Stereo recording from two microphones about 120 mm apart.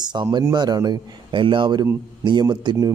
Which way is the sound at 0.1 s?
40° right (ahead or behind).